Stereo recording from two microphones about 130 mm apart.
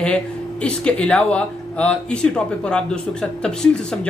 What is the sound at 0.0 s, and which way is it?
A man's voice, 10° left (ahead or behind).